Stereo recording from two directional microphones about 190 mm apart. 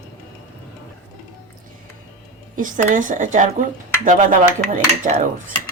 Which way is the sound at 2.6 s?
45° right (ahead or behind).